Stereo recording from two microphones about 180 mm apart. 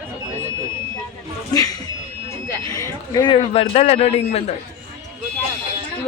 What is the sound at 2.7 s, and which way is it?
A man's voice, 20° left (ahead or behind).